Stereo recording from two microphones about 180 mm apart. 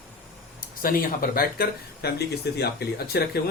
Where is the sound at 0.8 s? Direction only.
50° left (ahead or behind).